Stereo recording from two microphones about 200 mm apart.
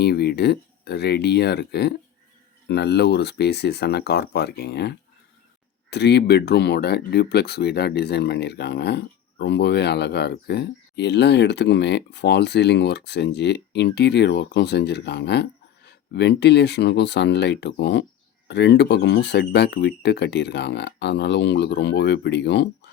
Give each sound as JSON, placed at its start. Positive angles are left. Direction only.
{"t": 0.0, "sound": "speech", "side_deg": 55}